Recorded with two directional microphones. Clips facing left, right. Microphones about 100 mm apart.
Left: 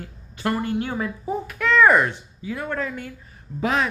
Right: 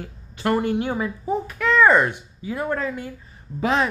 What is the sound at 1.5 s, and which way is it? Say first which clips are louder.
Speech: even; centre (ahead or behind).